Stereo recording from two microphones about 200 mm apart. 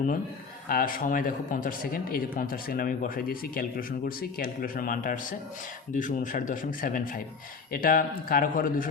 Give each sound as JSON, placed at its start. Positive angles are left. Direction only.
{"t": 0.7, "sound": "a man's voice", "side_deg": 45}